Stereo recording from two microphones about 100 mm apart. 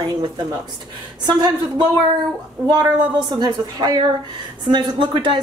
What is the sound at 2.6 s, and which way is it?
Speech, 45° right (ahead or behind).